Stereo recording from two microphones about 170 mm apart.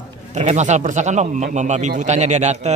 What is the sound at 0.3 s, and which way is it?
A man's voice, 45° right (ahead or behind).